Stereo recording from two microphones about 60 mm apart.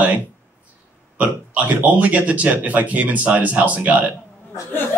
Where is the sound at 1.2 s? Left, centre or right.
Right.